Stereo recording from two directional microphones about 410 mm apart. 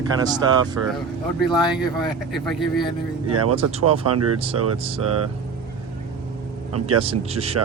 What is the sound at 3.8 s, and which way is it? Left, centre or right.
Speech, right.